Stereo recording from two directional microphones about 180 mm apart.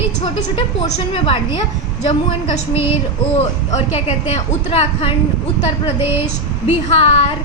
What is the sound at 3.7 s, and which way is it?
A woman's voice, 35° left (ahead or behind).